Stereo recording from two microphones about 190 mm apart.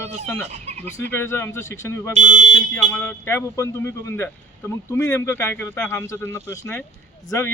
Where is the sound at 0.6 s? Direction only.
35° right (ahead or behind).